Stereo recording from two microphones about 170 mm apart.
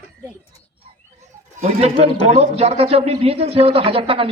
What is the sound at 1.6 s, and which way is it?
A man's voice, 35° right (ahead or behind).